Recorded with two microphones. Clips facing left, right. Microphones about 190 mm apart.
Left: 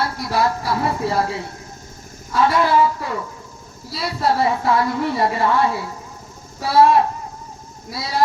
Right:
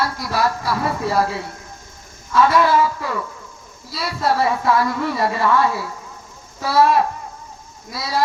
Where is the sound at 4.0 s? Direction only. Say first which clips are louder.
Even; 25° left (ahead or behind).